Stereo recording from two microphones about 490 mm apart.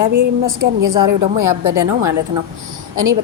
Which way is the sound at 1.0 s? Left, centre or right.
Right.